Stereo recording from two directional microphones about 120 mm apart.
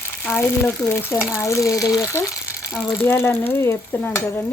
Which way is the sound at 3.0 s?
20° left (ahead or behind).